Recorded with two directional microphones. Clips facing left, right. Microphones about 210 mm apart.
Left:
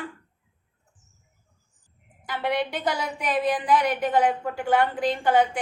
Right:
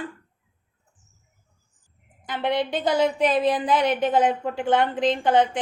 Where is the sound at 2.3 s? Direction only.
20° right (ahead or behind).